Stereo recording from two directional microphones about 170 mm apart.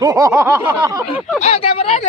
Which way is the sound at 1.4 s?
35° left (ahead or behind).